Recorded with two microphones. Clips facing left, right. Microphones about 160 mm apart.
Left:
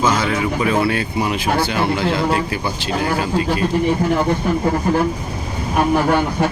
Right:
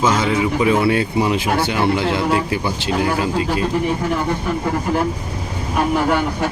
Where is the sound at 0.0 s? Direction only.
20° right (ahead or behind).